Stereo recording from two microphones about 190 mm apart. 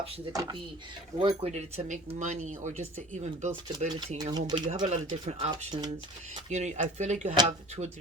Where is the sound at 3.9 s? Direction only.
20° right (ahead or behind).